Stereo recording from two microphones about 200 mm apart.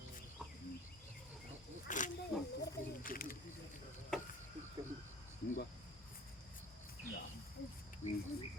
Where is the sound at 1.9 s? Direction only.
40° left (ahead or behind).